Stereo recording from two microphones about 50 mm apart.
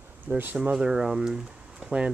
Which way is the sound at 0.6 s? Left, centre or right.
Centre.